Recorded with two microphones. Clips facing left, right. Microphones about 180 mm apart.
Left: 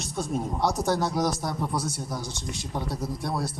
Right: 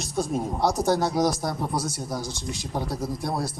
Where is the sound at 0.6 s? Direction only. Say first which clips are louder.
Right 3 dB; 35° right (ahead or behind).